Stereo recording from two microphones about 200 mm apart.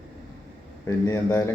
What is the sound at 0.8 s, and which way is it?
Speech, 15° left (ahead or behind).